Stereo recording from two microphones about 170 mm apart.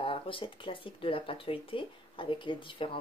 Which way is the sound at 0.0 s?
30° left (ahead or behind).